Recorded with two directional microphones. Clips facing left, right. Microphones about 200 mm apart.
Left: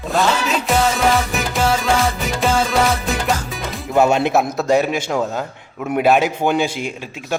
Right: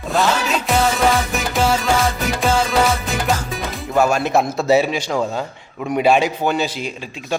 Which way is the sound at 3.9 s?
20° left (ahead or behind).